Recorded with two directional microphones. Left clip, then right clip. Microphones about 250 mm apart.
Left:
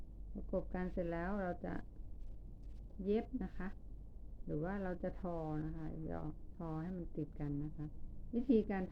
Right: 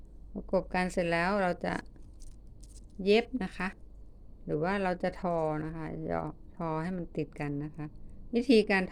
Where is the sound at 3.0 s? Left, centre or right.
Right.